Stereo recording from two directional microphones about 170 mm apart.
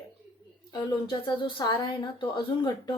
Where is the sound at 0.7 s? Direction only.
25° left (ahead or behind).